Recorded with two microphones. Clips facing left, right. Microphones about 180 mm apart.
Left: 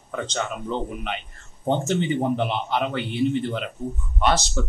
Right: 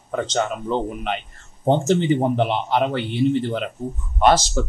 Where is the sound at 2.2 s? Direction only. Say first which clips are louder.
Right 3 dB; 45° right (ahead or behind).